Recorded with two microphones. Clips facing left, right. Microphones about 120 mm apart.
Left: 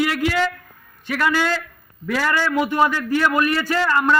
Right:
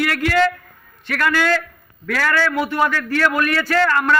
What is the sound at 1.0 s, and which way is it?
A man's voice, 15° left (ahead or behind).